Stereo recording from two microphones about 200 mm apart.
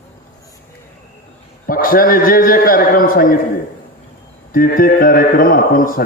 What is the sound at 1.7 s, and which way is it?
A man's voice, 45° left (ahead or behind).